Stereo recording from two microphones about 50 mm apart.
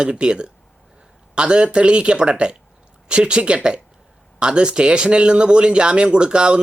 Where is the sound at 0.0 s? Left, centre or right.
Centre.